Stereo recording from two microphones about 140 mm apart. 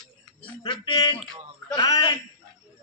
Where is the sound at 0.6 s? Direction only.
35° left (ahead or behind).